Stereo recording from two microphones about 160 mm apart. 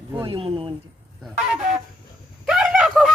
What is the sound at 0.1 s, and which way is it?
Speech, 25° right (ahead or behind).